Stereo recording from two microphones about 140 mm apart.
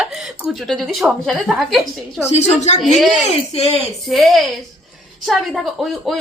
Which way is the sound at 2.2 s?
50° left (ahead or behind).